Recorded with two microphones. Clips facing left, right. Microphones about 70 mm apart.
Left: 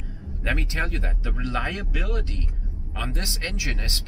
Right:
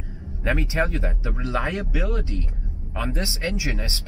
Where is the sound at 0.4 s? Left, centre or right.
Centre.